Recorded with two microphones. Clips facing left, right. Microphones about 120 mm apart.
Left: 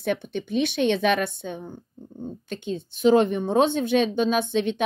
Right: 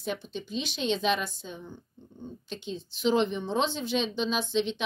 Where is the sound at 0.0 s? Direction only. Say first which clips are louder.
Left 7 dB; 60° left (ahead or behind).